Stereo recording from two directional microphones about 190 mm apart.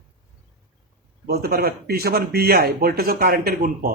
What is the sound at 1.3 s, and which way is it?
A man's voice, 55° right (ahead or behind).